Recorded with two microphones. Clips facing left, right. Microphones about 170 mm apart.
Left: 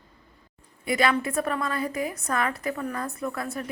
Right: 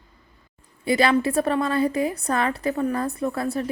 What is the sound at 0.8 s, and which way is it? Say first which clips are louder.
A woman's voice: right 5 dB; 30° right (ahead or behind).